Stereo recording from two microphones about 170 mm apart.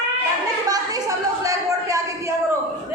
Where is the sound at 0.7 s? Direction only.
20° right (ahead or behind).